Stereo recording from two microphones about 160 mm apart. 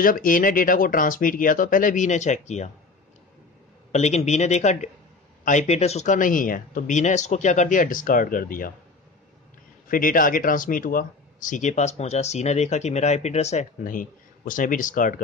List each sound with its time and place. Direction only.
0.0 s speech: 60° left (ahead or behind)
3.9 s speech: 45° left (ahead or behind); by 8.7 s 60° left (ahead or behind)
9.8 s speech: 60° left (ahead or behind); by 13.7 s 45° left (ahead or behind)
13.8 s speech: 55° left (ahead or behind)